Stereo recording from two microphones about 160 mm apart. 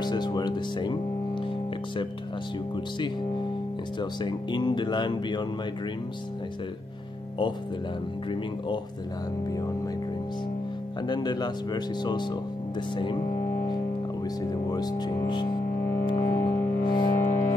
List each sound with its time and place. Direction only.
0.0 s music: 25° left (ahead or behind)
4.0 s speech: 30° left (ahead or behind)
11.0 s speech: 30° left (ahead or behind)
14.2 s speech: 25° left (ahead or behind)
16.1 s music: 30° left (ahead or behind)